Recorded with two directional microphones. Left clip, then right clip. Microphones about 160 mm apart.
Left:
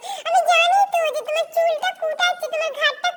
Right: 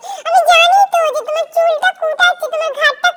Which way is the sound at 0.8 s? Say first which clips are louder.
Right 7 dB; 25° right (ahead or behind).